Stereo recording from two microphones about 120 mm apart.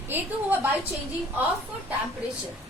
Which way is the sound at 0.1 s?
15° right (ahead or behind).